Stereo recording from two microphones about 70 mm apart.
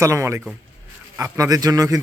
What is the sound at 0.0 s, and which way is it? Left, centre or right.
Speech, right.